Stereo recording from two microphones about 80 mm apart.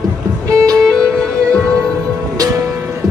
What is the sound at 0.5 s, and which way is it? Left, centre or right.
Music, right.